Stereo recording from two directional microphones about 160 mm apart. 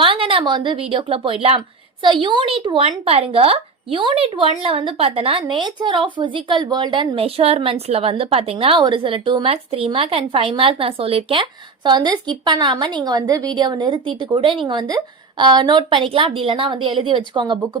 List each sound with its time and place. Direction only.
0.0 s a woman's voice: 35° right (ahead or behind)